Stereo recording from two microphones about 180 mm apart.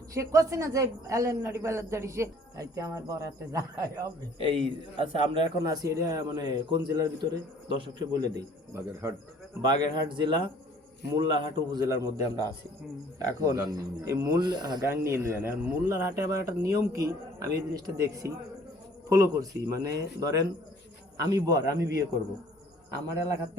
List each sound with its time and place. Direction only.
0.1 s speech: 15° right (ahead or behind)
4.4 s speech: 30° right (ahead or behind)